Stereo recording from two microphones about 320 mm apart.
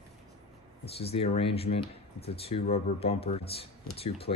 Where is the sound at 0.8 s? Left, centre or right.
Centre.